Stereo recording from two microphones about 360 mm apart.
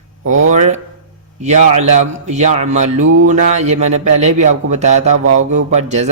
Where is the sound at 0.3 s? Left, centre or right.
Centre.